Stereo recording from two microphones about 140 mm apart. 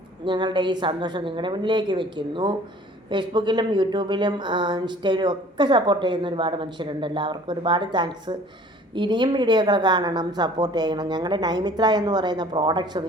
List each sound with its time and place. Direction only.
0.3 s speech: 35° right (ahead or behind)